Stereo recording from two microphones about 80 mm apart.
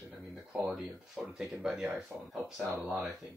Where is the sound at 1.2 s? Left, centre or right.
Centre.